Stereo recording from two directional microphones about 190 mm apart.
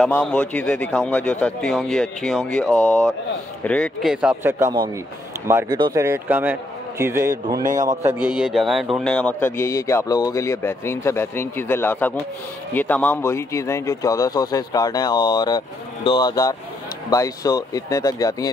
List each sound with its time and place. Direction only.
0.2 s a man's voice: 5° left (ahead or behind); by 7.6 s 15° right (ahead or behind)
7.6 s a man's voice: 40° right (ahead or behind)
7.9 s a man's voice: 10° right (ahead or behind)
8.4 s a man's voice: centre (ahead or behind); by 18.5 s 20° left (ahead or behind)